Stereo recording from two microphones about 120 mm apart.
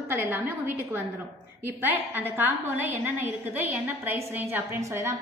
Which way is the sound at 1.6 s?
15° right (ahead or behind).